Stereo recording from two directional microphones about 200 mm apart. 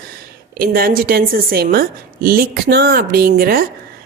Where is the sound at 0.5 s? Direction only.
50° right (ahead or behind).